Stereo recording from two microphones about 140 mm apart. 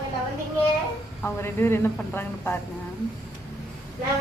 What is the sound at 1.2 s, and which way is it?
A woman's voice, 15° left (ahead or behind).